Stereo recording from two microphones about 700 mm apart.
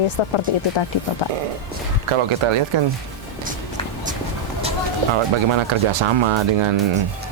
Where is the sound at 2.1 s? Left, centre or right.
Right.